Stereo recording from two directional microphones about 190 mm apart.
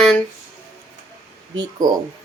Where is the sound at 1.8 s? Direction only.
20° right (ahead or behind).